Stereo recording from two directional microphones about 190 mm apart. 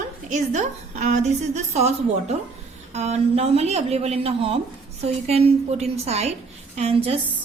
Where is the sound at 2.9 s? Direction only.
35° right (ahead or behind).